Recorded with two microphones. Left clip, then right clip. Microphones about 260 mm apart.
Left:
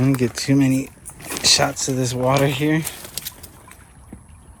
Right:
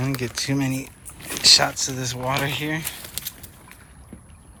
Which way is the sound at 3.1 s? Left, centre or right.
Centre.